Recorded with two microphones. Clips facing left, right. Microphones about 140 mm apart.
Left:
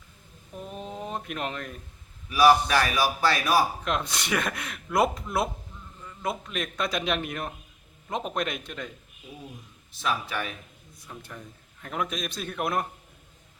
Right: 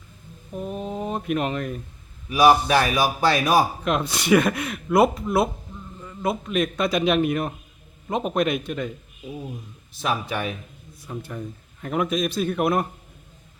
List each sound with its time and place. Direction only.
0.7 s speech: 5° right (ahead or behind)
2.3 s speech: 20° right (ahead or behind)
3.8 s a man's voice: 5° right (ahead or behind)
6.2 s a man's voice: 5° right (ahead or behind)
10.1 s speech: 25° right (ahead or behind)
11.0 s a man's voice: 5° right (ahead or behind)